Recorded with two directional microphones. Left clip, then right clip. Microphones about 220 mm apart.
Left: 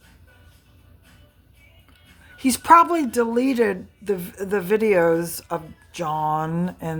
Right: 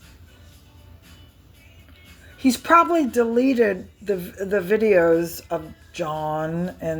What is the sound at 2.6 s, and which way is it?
Speech, 15° left (ahead or behind).